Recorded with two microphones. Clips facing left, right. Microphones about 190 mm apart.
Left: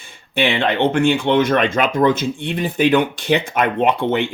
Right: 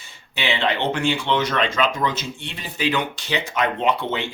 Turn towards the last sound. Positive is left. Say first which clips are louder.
# left 5 dB
turn(degrees=55)  # may be behind; listen again after turning